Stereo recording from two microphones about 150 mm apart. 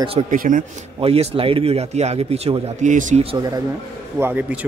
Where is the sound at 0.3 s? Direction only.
65° right (ahead or behind).